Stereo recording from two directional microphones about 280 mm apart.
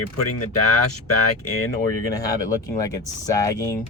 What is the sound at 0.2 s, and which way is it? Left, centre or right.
Speech, left.